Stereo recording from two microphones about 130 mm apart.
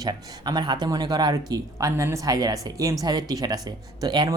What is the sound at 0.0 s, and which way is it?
Speech, 35° right (ahead or behind).